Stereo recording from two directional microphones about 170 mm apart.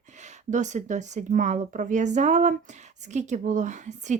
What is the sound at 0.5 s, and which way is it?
A woman's voice, 45° right (ahead or behind).